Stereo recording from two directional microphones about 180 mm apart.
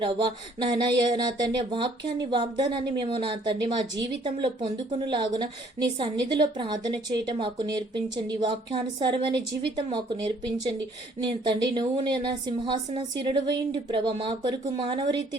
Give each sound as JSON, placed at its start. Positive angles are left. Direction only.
{"t": 0.6, "sound": "a woman's voice", "side_deg": -25}